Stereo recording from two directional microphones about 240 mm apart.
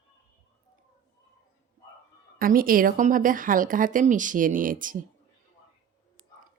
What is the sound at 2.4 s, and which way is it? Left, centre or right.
A woman's voice, right.